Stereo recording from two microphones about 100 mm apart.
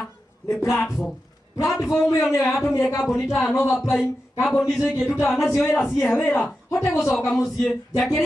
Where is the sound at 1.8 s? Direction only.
30° left (ahead or behind).